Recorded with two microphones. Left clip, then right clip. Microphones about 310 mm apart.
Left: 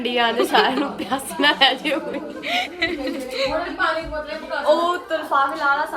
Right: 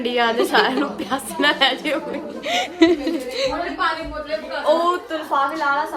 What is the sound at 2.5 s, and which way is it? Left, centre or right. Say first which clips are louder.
Speech: right 1 dB; right.